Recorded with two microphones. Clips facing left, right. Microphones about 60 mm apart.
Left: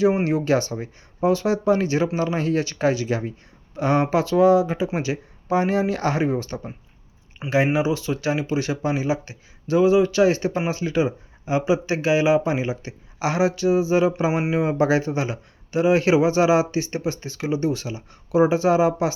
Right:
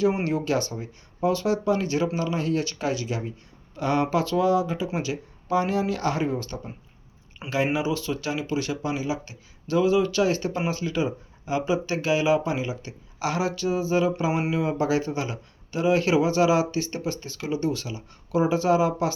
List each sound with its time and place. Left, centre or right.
0.3 s speech: left
3.8 s speech: left